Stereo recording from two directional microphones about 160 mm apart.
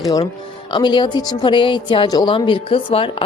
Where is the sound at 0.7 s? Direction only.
30° left (ahead or behind).